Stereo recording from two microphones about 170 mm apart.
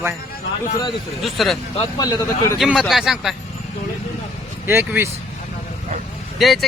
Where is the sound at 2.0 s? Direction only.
20° left (ahead or behind).